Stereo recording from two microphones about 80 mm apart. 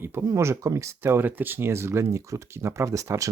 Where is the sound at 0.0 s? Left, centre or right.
Right.